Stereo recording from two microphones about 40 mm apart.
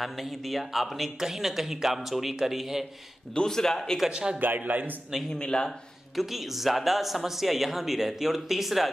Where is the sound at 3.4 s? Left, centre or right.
Centre.